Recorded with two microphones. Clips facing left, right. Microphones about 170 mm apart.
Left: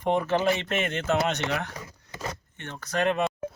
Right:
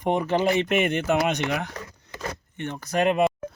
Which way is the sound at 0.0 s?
15° right (ahead or behind).